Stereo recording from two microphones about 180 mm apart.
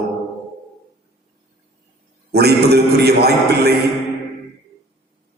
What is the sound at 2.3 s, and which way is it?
A man's voice, 65° right (ahead or behind).